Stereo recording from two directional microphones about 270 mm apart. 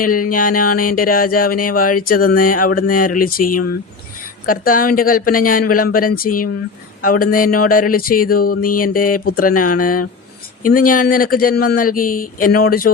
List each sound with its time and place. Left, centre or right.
0.0 s speech: left
4.4 s speech: left